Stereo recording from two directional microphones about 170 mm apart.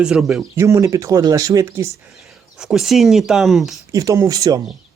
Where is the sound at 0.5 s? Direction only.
15° right (ahead or behind).